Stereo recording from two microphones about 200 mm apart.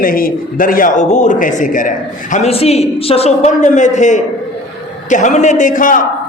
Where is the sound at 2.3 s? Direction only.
30° left (ahead or behind).